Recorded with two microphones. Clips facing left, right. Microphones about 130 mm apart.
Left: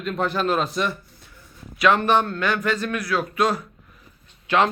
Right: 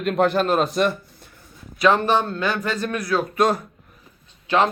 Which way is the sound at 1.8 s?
35° right (ahead or behind).